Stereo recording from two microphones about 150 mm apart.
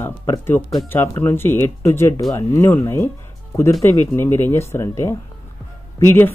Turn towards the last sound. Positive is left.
turn(degrees=15)  # may be behind; listen again after turning